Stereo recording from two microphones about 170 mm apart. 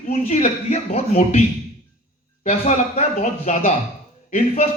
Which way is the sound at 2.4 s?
40° left (ahead or behind).